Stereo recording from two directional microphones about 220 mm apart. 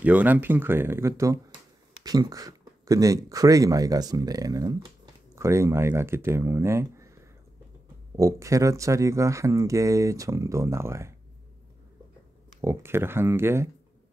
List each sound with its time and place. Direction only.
0.0 s speech: 5° right (ahead or behind)
8.2 s speech: 15° right (ahead or behind)
12.6 s speech: 10° right (ahead or behind)